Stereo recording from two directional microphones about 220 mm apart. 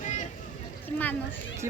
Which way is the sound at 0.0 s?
30° left (ahead or behind).